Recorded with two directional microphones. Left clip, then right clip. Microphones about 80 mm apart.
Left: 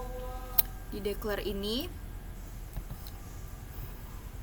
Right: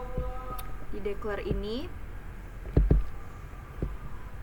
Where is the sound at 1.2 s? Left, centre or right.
Left.